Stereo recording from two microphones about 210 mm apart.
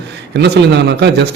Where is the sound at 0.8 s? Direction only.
55° right (ahead or behind).